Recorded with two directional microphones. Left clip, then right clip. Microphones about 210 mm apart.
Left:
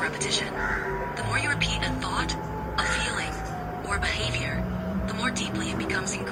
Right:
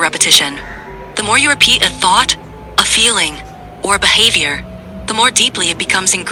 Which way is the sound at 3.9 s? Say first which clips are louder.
Right 19 dB; 55° right (ahead or behind).